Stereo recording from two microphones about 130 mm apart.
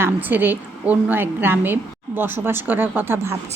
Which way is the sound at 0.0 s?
15° right (ahead or behind).